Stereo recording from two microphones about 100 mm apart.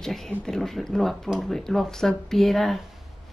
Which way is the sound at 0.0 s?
Centre (ahead or behind).